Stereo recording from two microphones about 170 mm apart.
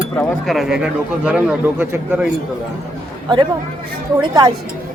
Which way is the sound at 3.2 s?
25° right (ahead or behind).